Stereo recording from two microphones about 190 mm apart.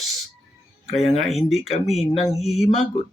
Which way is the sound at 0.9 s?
35° left (ahead or behind).